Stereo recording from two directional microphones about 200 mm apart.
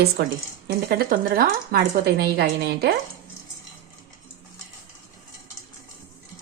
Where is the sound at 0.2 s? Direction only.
50° right (ahead or behind).